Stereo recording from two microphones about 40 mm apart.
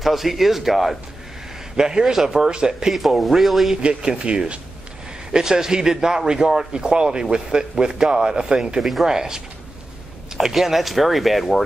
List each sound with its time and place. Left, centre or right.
0.0 s speech: centre
1.8 s a man's voice: centre
2.9 s speech: centre
4.2 s speech: right
5.3 s a man's voice: centre